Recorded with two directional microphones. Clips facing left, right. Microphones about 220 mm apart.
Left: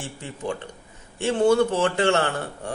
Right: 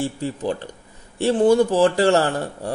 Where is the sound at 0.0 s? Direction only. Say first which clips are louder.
Right 8 dB; 35° right (ahead or behind).